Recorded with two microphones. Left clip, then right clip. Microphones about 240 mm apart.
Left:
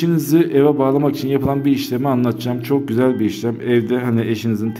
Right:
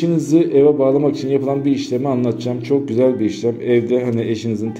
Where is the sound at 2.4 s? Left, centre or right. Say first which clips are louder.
Right 1 dB; left.